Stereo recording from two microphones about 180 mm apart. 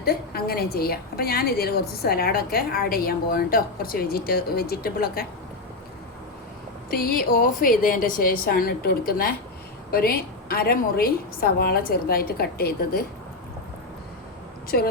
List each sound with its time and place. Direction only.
0.0 s a woman's voice: 60° left (ahead or behind)
6.9 s a woman's voice: 55° left (ahead or behind)
14.7 s a woman's voice: 55° left (ahead or behind)